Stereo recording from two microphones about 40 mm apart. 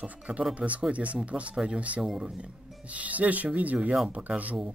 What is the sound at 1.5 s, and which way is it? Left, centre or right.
Speech, centre.